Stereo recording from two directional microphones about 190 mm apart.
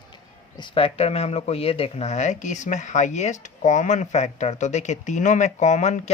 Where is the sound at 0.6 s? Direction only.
30° left (ahead or behind).